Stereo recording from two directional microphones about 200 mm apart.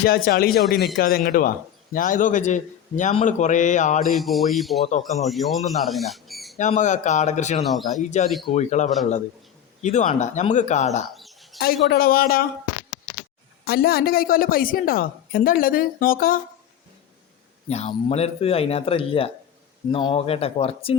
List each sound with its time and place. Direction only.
0.0 s a woman's voice: 50° left (ahead or behind)
4.1 s speech: centre (ahead or behind)
6.6 s speech: 35° left (ahead or behind)
7.6 s speech: centre (ahead or behind)
8.4 s speech: 35° left (ahead or behind)
11.1 s bird: centre (ahead or behind)
11.6 s a woman's voice: 50° left (ahead or behind)
13.7 s a woman's voice: 50° left (ahead or behind)
17.7 s speech: 30° left (ahead or behind)